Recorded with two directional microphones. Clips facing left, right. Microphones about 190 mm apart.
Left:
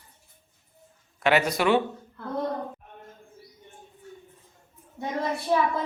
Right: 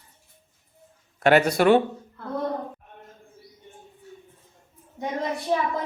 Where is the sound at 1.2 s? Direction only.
50° right (ahead or behind).